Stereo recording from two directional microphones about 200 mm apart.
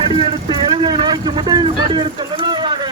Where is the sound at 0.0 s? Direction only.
25° right (ahead or behind).